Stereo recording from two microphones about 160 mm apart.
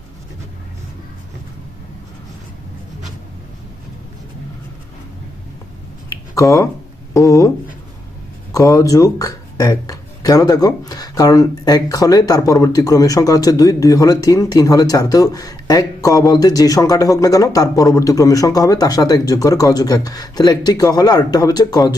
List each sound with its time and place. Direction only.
6.1 s a sound: 20° left (ahead or behind)
7.1 s speech: 20° left (ahead or behind)
8.5 s speech: 20° left (ahead or behind)